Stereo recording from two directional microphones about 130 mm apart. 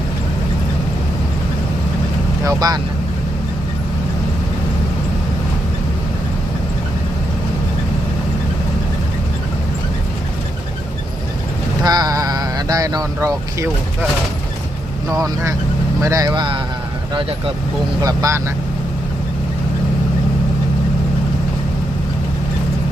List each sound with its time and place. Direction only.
2.4 s speech: 30° right (ahead or behind)
11.8 s a sound: 30° right (ahead or behind)
15.1 s speech: 25° right (ahead or behind); by 17.5 s 40° right (ahead or behind)
18.0 s speech: 25° right (ahead or behind)